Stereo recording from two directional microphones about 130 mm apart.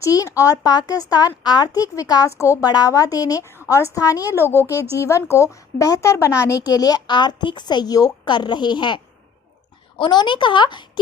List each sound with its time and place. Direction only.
0.0 s a woman's voice: 25° left (ahead or behind)
4.6 s a woman's voice: 15° right (ahead or behind)
4.9 s a woman's voice: 25° left (ahead or behind)
10.0 s speech: 35° left (ahead or behind)